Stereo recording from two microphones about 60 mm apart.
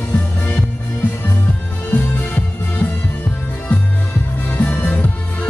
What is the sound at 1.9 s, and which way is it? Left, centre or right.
Music, left.